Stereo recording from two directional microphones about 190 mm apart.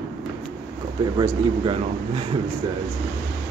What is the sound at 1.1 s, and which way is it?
Speech, 30° right (ahead or behind).